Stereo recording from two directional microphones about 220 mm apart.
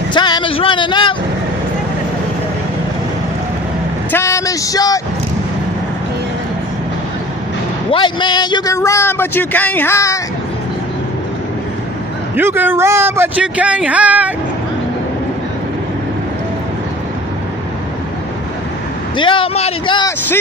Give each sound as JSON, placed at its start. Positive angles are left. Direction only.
{"t": 0.1, "sound": "a sound", "side_deg": 20}
{"t": 4.1, "sound": "speech", "side_deg": 15}
{"t": 7.9, "sound": "speech", "side_deg": 20}
{"t": 12.4, "sound": "a man's voice", "side_deg": -10}
{"t": 19.1, "sound": "speech", "side_deg": 20}